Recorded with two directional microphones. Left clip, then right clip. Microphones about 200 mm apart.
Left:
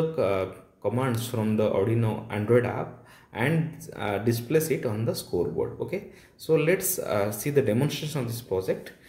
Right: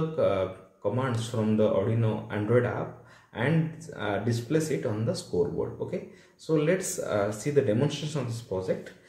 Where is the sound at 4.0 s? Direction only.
40° left (ahead or behind).